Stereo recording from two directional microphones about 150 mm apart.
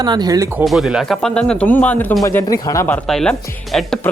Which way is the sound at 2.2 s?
20° left (ahead or behind).